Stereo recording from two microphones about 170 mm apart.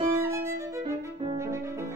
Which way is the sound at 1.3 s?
15° right (ahead or behind).